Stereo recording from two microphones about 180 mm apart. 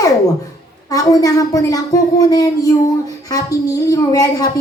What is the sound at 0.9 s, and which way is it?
A woman's voice, 20° left (ahead or behind).